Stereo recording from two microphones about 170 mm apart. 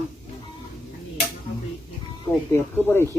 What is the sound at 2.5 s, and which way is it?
Speech, 15° left (ahead or behind).